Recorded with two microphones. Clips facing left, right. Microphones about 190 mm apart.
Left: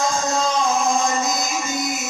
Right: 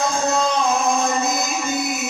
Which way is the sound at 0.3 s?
60° right (ahead or behind).